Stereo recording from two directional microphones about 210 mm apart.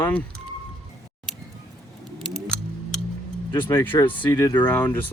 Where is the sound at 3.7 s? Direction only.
10° left (ahead or behind).